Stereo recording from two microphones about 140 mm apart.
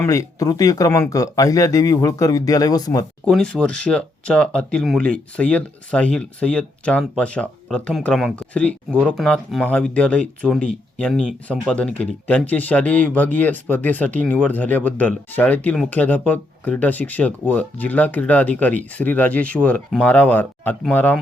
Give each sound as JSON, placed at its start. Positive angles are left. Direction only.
{"t": 0.0, "sound": "speech", "side_deg": 25}
{"t": 3.2, "sound": "speech", "side_deg": 5}